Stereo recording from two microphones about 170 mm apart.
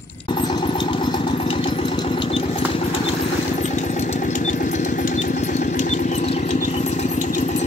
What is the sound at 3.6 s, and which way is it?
Vehicle, 45° left (ahead or behind).